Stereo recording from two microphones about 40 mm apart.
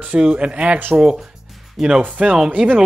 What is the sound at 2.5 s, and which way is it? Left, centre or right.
Speech, right.